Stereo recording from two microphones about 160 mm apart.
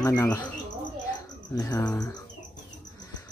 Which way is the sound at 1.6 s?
20° left (ahead or behind).